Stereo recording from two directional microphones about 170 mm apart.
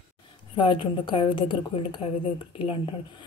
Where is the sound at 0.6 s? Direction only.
30° left (ahead or behind).